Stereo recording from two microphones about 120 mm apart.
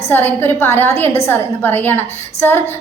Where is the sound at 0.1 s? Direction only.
15° left (ahead or behind).